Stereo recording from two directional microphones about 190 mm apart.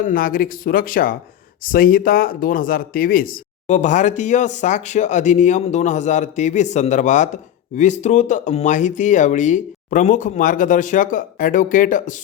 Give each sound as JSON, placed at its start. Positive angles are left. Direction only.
{"t": 0.0, "sound": "speech", "side_deg": 50}